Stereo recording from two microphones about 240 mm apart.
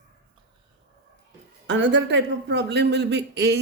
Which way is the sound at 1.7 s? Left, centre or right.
Right.